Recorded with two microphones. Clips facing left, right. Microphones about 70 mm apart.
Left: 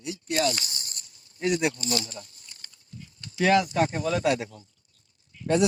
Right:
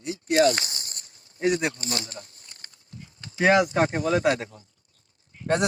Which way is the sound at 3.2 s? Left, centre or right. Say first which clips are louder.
Right 2 dB; right.